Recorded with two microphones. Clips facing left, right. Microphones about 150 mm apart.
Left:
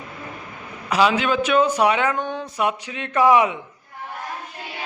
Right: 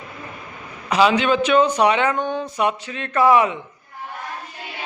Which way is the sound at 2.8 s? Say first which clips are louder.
Left 1 dB; 15° left (ahead or behind).